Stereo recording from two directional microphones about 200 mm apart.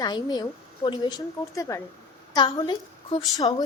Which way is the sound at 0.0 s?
20° left (ahead or behind).